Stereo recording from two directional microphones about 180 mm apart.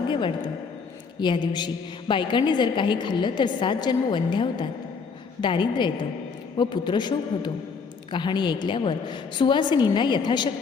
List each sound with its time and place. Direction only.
0.1 s a woman's voice: 25° left (ahead or behind)